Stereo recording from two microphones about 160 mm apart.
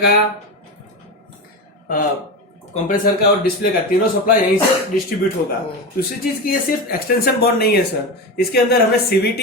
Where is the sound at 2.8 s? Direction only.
65° left (ahead or behind).